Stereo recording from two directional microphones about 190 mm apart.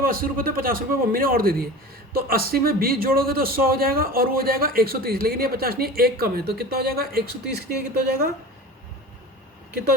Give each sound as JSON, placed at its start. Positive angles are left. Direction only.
{"t": 0.0, "sound": "a man's voice", "side_deg": -50}